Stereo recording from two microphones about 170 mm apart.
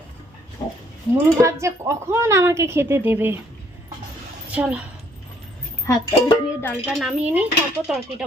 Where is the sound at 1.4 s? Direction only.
15° right (ahead or behind).